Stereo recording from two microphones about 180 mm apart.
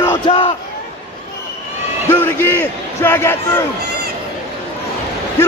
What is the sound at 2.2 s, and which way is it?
Speech, 10° left (ahead or behind).